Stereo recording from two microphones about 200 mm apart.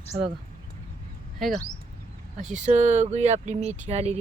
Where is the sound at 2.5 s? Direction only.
35° right (ahead or behind).